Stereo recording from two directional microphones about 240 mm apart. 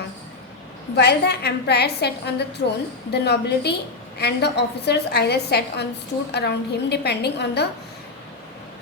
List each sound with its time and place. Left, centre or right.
0.9 s a woman's voice: left